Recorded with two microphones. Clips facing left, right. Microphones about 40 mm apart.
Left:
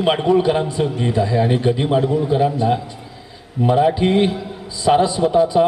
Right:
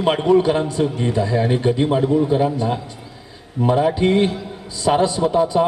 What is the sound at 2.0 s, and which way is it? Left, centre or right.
Speech, centre.